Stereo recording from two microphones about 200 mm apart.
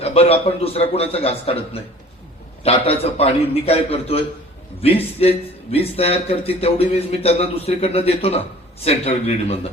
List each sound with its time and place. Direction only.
0.0 s a man's voice: 30° left (ahead or behind)